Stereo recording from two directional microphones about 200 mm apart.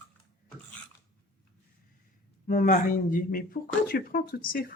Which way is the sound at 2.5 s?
40° left (ahead or behind).